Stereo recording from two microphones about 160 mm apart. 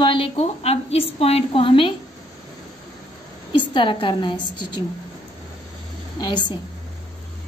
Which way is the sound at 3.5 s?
30° left (ahead or behind).